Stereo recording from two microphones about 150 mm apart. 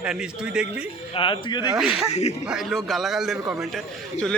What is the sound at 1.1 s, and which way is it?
Speech, 35° left (ahead or behind).